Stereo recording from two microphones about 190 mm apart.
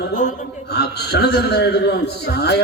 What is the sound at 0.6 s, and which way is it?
A man's voice, 60° left (ahead or behind).